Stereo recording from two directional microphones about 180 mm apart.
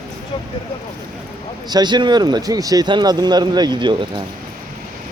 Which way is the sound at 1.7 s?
25° right (ahead or behind).